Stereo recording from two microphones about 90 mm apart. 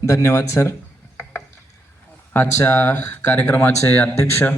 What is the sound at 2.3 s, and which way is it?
A man's voice, 25° left (ahead or behind).